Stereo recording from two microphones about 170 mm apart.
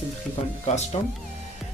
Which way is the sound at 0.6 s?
40° left (ahead or behind).